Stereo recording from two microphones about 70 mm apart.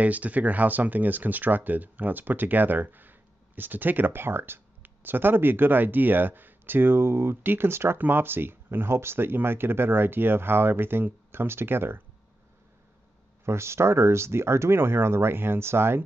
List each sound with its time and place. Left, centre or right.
0.0 s speech: right
13.5 s speech: right